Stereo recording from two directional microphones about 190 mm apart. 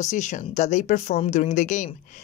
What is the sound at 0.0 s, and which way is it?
A woman's voice, 40° left (ahead or behind).